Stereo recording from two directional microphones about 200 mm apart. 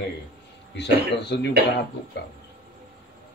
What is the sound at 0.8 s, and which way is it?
Speech, 60° left (ahead or behind).